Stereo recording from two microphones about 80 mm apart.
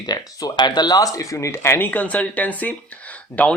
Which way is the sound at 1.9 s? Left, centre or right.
Centre.